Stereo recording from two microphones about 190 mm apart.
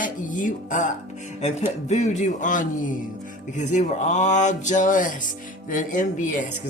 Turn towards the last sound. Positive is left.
turn(degrees=40)  # may be behind; listen again after turning